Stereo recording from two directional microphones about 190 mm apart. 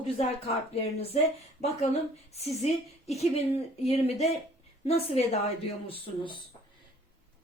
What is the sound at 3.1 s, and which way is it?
A woman's voice, 35° left (ahead or behind).